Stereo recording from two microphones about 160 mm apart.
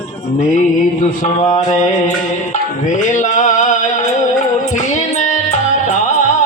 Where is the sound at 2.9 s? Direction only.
50° left (ahead or behind).